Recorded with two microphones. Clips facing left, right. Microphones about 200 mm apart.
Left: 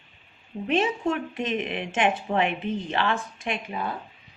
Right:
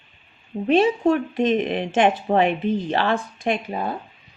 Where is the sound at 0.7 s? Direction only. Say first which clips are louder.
Right 7 dB; 35° right (ahead or behind).